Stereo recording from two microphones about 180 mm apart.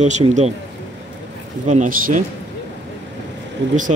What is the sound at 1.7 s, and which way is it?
Speech, 45° right (ahead or behind).